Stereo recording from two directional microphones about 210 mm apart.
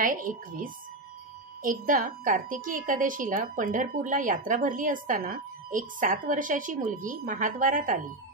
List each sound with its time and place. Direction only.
0.0 s speech: 40° right (ahead or behind)